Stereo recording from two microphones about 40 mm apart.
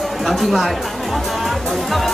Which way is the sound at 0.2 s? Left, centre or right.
Centre.